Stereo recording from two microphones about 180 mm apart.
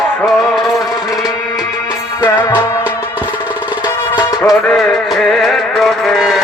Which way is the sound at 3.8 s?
25° left (ahead or behind).